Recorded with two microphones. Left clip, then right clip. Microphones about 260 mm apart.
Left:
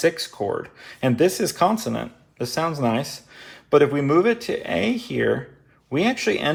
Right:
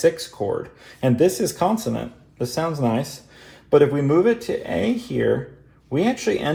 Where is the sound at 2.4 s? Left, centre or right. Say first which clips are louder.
Even; left.